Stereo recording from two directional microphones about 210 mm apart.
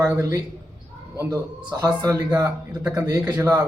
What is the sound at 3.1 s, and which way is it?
Speech, 15° right (ahead or behind).